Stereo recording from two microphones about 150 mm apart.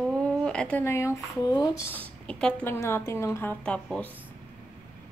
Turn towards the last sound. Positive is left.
turn(degrees=10)  # may be behind; listen again after turning